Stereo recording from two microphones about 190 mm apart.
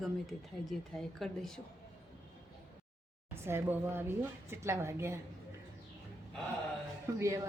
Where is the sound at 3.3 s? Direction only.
15° right (ahead or behind).